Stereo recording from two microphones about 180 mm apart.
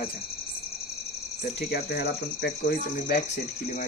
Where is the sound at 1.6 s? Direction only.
60° left (ahead or behind).